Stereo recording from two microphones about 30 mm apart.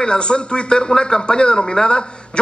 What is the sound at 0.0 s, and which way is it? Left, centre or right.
A man's voice, left.